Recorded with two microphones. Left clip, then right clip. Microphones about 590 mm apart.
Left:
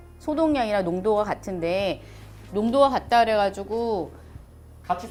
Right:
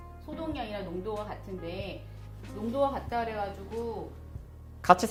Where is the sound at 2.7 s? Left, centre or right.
Left.